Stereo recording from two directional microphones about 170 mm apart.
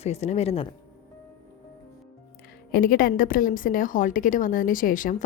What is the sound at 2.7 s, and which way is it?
A woman's voice, 60° left (ahead or behind).